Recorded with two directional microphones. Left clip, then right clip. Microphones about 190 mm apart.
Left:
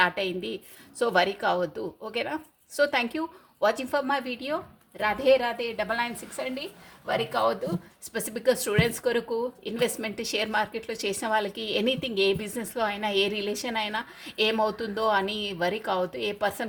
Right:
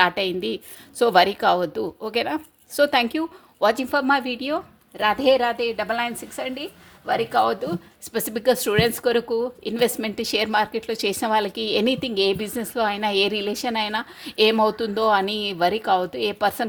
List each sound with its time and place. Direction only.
0.0 s a woman's voice: 45° right (ahead or behind)